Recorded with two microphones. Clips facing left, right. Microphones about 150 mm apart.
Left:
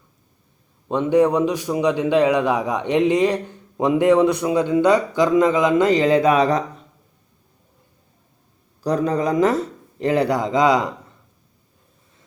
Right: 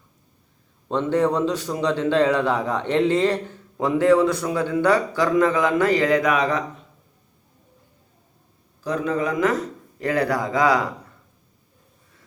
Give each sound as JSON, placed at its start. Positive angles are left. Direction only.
{"t": 0.9, "sound": "a man's voice", "side_deg": 15}
{"t": 8.8, "sound": "speech", "side_deg": 40}